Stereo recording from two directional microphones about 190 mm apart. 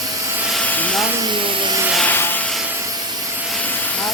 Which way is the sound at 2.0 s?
10° left (ahead or behind).